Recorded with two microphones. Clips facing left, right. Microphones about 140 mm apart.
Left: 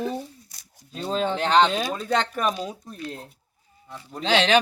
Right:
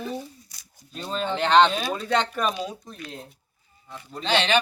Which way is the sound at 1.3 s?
5° left (ahead or behind).